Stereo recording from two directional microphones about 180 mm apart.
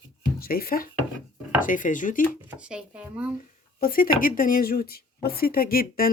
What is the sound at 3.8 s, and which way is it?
Speech, 55° left (ahead or behind).